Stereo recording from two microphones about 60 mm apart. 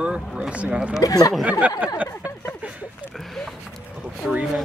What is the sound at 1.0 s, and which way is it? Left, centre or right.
Speech, left.